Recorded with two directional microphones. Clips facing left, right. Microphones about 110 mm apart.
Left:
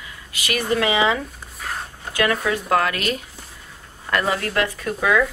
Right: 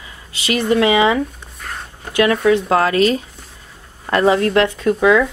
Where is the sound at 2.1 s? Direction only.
25° right (ahead or behind).